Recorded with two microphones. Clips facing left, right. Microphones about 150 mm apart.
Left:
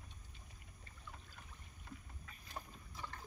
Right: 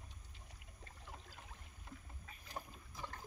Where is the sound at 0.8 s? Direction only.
90° right.